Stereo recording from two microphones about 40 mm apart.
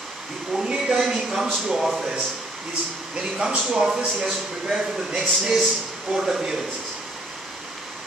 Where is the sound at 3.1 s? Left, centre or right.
Centre.